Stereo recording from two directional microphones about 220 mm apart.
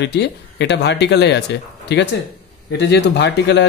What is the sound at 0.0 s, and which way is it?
Speech, 50° left (ahead or behind).